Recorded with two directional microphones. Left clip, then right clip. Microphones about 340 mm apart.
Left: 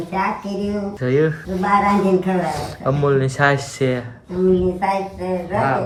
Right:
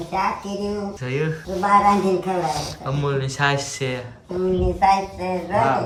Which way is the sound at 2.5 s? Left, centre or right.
Centre.